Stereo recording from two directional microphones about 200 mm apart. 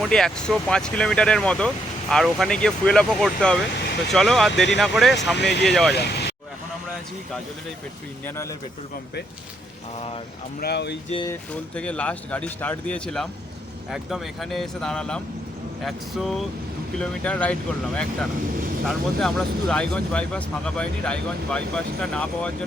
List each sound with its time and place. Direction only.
0.0 s speech: 5° left (ahead or behind)
5.4 s speech: 55° left (ahead or behind)
5.6 s speech: centre (ahead or behind)
5.9 s speech: 55° left (ahead or behind)
10.6 s speech: 55° left (ahead or behind)
11.3 s speech: 5° left (ahead or behind)